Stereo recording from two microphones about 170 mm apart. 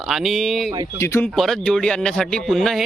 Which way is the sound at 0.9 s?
15° left (ahead or behind).